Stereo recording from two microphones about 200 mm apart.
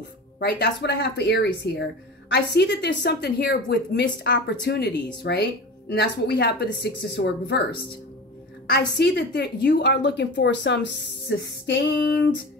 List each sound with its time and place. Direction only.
0.4 s a woman's voice: 60° left (ahead or behind)
8.6 s a woman's voice: 55° left (ahead or behind)